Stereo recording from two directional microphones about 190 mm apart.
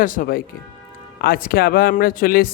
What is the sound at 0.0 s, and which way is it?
Speech, 45° left (ahead or behind).